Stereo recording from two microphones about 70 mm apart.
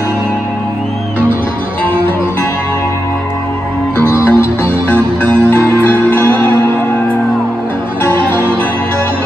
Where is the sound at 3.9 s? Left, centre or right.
Left.